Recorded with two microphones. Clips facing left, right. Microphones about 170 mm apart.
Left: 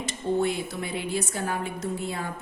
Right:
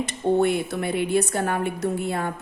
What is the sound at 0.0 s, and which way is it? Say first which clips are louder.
A woman's voice: right 5 dB; 60° right (ahead or behind).